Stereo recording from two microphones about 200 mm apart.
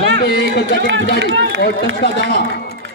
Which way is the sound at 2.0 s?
55° left (ahead or behind).